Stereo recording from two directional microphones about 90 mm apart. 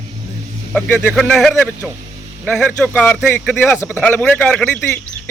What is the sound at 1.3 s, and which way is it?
Speech, centre (ahead or behind).